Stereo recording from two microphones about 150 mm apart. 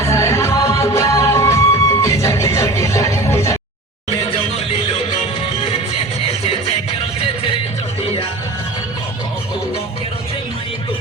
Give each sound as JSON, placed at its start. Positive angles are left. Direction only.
{"t": 0.0, "sound": "music", "side_deg": 20}